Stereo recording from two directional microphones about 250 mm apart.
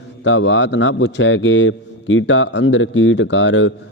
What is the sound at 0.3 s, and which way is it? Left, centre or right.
A man's voice, left.